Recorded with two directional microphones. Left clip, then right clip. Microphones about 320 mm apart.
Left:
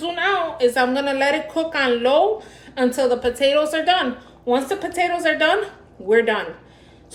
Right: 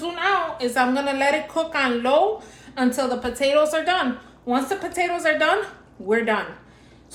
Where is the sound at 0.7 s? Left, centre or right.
Right.